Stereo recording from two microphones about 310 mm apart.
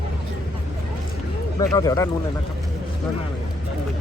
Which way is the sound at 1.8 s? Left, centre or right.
Centre.